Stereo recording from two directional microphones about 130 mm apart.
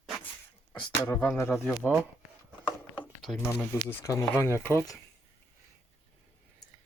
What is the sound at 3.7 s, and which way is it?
Speech, 20° left (ahead or behind).